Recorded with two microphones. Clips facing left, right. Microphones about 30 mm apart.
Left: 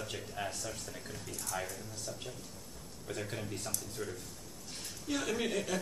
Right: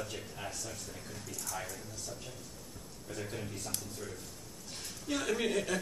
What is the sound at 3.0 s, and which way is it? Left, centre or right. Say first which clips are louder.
Speech: left 1 dB; centre.